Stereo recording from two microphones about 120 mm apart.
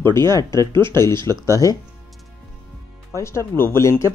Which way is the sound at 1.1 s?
35° right (ahead or behind).